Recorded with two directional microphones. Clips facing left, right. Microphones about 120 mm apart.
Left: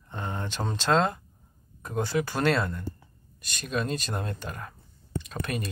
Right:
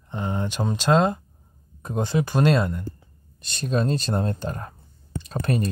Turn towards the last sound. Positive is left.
turn(degrees=-35)  # may be behind; listen again after turning